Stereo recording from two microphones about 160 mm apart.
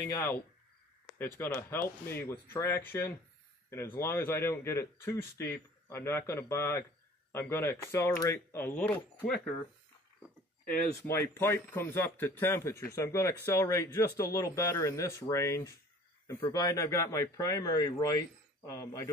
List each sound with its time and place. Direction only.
0.1 s speech: 15° left (ahead or behind)
11.0 s speech: 15° left (ahead or behind)